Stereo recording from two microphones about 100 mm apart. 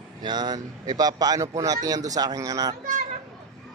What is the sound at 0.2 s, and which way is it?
Speech, 45° right (ahead or behind).